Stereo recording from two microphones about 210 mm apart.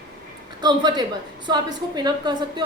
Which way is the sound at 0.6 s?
20° right (ahead or behind).